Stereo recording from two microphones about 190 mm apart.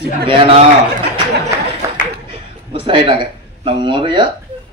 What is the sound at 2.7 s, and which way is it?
Speech, 25° right (ahead or behind).